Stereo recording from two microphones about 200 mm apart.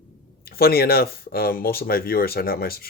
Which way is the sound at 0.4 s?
50° left (ahead or behind).